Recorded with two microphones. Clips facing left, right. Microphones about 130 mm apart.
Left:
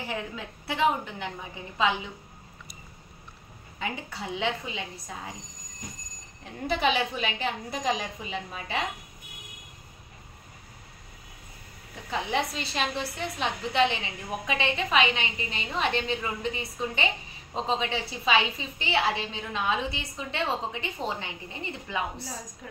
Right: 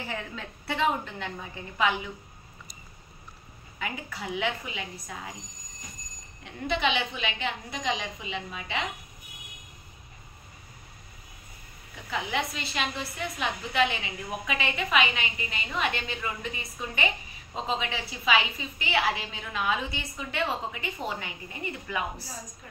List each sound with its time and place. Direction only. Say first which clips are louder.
0.0 s a woman's voice: left 2 dB; 15° left (ahead or behind)
3.8 s a woman's voice: left 1 dB; 30° left (ahead or behind)
6.4 s a woman's voice: left 2 dB; 40° left (ahead or behind)
11.9 s a woman's voice: left 2 dB; 35° left (ahead or behind)